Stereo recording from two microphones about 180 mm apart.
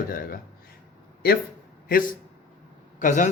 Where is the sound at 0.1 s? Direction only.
55° left (ahead or behind).